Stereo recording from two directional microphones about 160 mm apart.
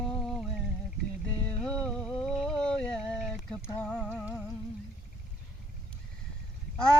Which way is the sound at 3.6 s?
15° left (ahead or behind).